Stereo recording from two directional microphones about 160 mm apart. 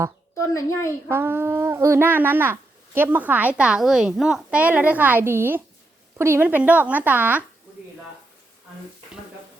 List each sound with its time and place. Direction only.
0.3 s a child's voice: 15° left (ahead or behind)
1.1 s speech: 15° right (ahead or behind)